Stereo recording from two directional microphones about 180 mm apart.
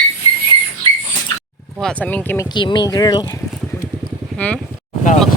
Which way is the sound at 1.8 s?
10° left (ahead or behind).